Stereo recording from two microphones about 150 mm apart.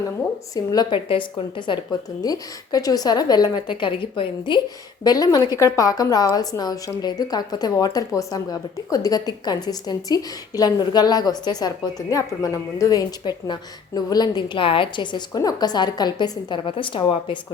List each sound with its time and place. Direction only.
0.5 s a woman's voice: 25° left (ahead or behind)